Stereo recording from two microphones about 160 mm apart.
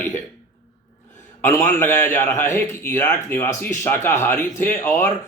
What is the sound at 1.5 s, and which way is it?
A man's voice, 15° left (ahead or behind).